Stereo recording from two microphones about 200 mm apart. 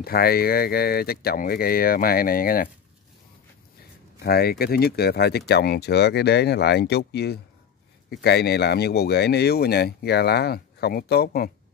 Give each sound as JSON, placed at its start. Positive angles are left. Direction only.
{"t": 0.0, "sound": "speech", "side_deg": 50}
{"t": 4.2, "sound": "speech", "side_deg": 50}